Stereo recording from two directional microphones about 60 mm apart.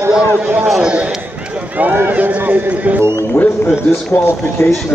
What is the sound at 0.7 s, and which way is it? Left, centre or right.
Speech, centre.